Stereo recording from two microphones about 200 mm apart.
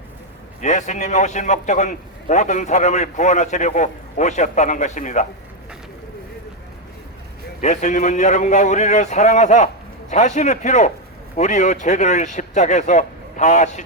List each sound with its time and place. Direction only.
0.6 s a man's voice: 35° left (ahead or behind)
7.6 s a man's voice: 35° left (ahead or behind)